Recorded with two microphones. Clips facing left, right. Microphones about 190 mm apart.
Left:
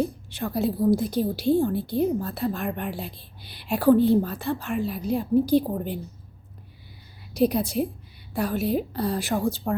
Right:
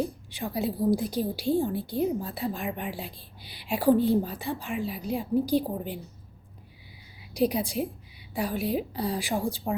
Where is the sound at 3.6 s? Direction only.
15° right (ahead or behind).